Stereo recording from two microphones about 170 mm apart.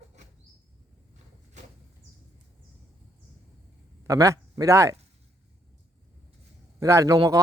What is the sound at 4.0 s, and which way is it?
Speech, 20° right (ahead or behind).